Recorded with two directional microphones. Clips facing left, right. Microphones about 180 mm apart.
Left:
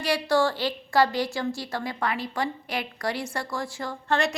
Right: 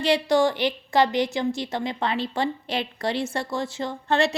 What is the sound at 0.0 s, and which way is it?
A woman's voice, 20° right (ahead or behind).